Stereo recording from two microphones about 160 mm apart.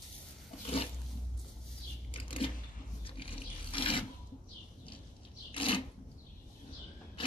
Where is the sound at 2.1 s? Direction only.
35° left (ahead or behind).